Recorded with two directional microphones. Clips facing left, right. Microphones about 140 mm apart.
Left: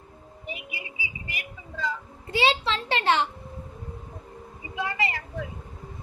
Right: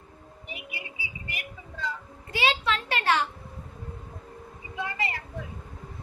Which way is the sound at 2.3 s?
30° left (ahead or behind).